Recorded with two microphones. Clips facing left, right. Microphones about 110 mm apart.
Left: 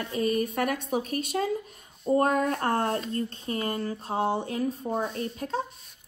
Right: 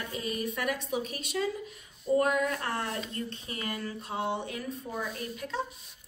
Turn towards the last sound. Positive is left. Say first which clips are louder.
# left 4 dB
turn(degrees=40)  # may be behind; listen again after turning